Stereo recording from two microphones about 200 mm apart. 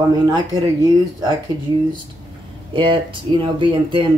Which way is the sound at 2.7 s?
25° right (ahead or behind).